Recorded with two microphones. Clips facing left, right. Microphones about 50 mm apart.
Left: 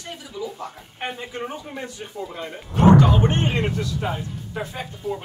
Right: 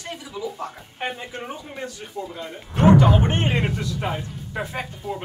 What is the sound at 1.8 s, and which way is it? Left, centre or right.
Speech, left.